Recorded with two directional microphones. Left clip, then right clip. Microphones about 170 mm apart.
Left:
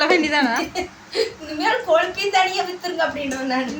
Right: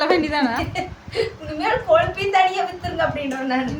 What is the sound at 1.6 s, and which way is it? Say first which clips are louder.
A woman's voice: right 1 dB; 10° right (ahead or behind).